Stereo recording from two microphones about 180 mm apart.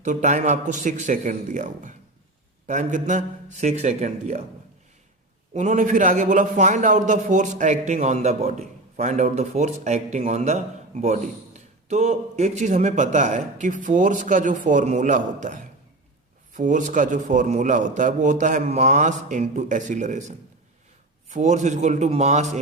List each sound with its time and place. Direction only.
0.0 s a man's voice: 45° right (ahead or behind)
5.5 s a man's voice: 40° right (ahead or behind)